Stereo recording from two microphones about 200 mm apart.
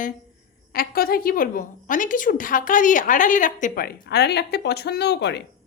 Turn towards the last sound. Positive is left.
turn(degrees=60)  # may be behind; listen again after turning